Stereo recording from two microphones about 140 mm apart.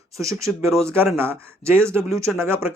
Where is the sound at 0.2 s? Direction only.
20° right (ahead or behind).